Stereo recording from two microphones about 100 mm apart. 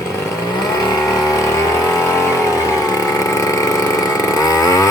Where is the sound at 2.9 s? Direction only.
35° left (ahead or behind).